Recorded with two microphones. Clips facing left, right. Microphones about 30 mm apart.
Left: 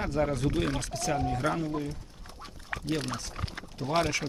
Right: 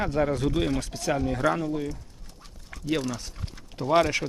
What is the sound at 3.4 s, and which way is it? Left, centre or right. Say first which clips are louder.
Speech: left 3 dB; left.